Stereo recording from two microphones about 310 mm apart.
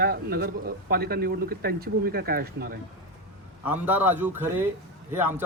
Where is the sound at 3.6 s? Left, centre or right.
Centre.